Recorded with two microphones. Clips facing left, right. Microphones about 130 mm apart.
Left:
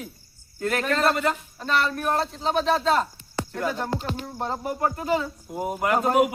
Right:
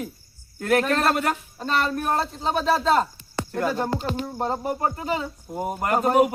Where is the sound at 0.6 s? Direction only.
55° right (ahead or behind).